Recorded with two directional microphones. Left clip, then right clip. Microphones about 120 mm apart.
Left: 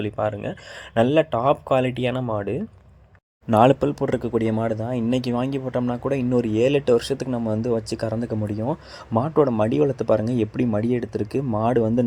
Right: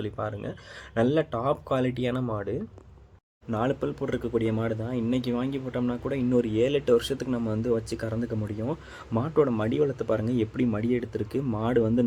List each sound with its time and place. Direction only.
0.0 s speech: 35° left (ahead or behind)
3.5 s speech: 80° left
4.0 s speech: 45° left (ahead or behind)